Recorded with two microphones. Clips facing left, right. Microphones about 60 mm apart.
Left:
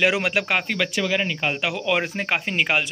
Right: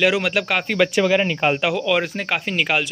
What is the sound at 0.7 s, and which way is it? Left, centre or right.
Speech, right.